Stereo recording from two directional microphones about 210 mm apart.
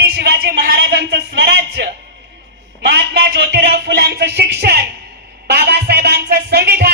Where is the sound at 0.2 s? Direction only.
50° right (ahead or behind).